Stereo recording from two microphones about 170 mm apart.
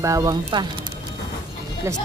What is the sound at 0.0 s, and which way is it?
Speech, 20° right (ahead or behind).